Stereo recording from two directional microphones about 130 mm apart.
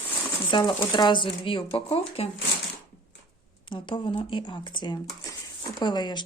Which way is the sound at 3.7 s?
40° left (ahead or behind).